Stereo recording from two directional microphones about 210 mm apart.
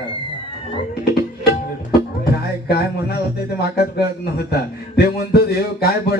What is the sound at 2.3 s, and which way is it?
Speech, 50° left (ahead or behind).